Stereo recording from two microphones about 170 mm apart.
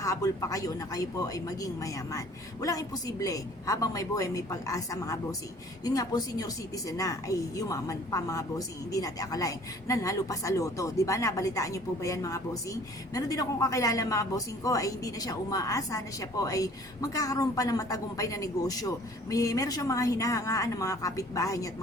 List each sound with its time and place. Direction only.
0.0 s a woman's voice: 20° left (ahead or behind)